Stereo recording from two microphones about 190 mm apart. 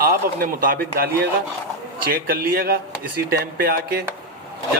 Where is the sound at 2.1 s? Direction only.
50° right (ahead or behind).